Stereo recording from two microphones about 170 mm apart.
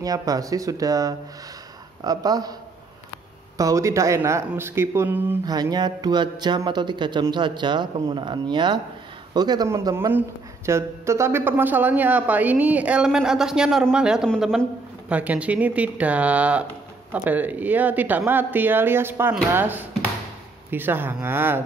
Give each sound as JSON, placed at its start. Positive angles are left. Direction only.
{"t": 0.0, "sound": "speech", "side_deg": -20}
{"t": 3.5, "sound": "speech", "side_deg": -20}
{"t": 5.4, "sound": "speech", "side_deg": -25}